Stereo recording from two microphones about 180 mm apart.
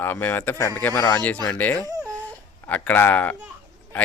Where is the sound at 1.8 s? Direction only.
20° right (ahead or behind).